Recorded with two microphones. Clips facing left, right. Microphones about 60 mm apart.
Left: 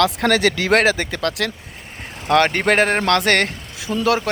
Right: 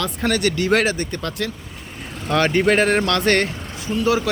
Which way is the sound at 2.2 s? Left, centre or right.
Left.